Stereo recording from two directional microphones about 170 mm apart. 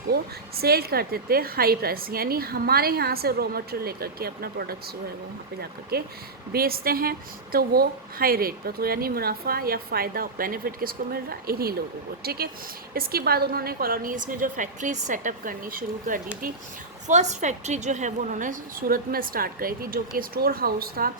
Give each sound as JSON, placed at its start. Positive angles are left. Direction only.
{"t": 0.1, "sound": "a woman's voice", "side_deg": -65}
{"t": 5.9, "sound": "a woman's voice", "side_deg": -65}
{"t": 17.1, "sound": "a woman's voice", "side_deg": -45}